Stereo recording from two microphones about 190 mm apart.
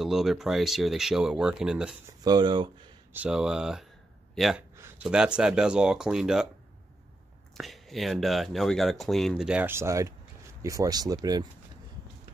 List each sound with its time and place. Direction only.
0.0 s speech: centre (ahead or behind)
2.2 s speech: 20° right (ahead or behind)
3.1 s speech: 5° right (ahead or behind)
7.5 s speech: centre (ahead or behind); by 11.1 s 20° right (ahead or behind)